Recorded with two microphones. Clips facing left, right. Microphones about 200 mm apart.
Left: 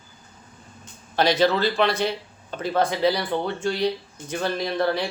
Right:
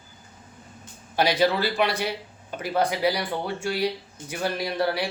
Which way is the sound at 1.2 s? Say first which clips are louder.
Left 2 dB; 10° right (ahead or behind).